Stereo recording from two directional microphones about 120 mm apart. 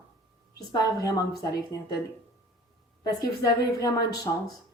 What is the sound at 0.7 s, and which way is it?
A woman's voice, 35° left (ahead or behind).